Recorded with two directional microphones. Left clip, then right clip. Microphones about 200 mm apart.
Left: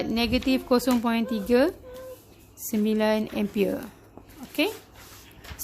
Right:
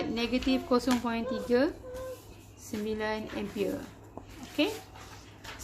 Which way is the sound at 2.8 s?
50° left (ahead or behind).